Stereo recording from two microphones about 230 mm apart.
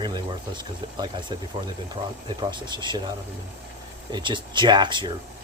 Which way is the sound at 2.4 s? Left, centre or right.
Centre.